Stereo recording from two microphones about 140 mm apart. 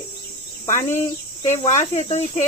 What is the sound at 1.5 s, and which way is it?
Speech, 55° left (ahead or behind).